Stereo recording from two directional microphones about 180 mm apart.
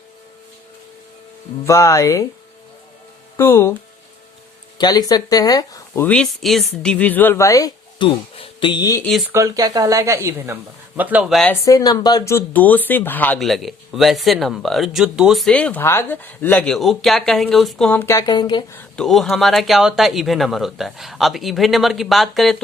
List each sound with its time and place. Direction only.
1.6 s speech: 15° left (ahead or behind)
3.3 s speech: 15° left (ahead or behind)
4.8 s speech: 20° left (ahead or behind)
6.1 s speech: 5° left (ahead or behind); by 9.0 s 20° left (ahead or behind)
9.3 s speech: 20° right (ahead or behind); by 11.5 s centre (ahead or behind)
11.6 s speech: 20° left (ahead or behind)
18.8 s speech: 5° left (ahead or behind)